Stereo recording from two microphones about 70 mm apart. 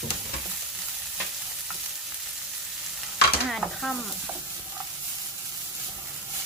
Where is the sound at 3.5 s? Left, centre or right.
Centre.